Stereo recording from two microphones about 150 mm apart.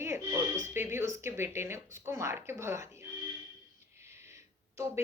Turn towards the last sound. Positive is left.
turn(degrees=-20)  # may be behind; listen again after turning